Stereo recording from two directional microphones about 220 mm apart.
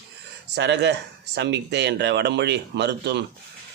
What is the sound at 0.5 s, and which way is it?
A man's voice, 50° right (ahead or behind).